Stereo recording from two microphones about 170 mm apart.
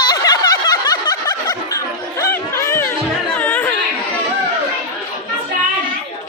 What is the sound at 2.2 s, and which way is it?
Chatter, 15° left (ahead or behind).